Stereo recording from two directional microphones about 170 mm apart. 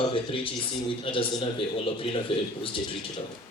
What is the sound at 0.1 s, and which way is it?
Speech, 30° left (ahead or behind).